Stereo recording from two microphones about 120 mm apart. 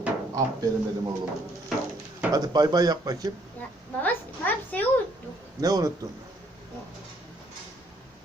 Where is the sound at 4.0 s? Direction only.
15° left (ahead or behind).